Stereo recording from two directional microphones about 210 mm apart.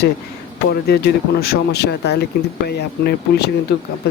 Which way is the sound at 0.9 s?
50° left (ahead or behind).